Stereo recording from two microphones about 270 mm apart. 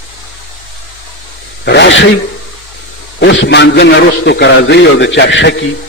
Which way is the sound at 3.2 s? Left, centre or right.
Left.